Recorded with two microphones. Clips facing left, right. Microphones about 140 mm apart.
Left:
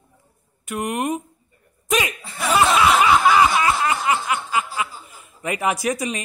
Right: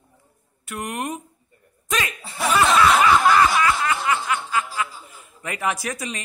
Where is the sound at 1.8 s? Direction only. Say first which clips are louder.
Left 4 dB; 20° left (ahead or behind).